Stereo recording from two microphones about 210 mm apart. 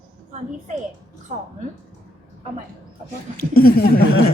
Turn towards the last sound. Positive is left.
turn(degrees=45)  # may be behind; listen again after turning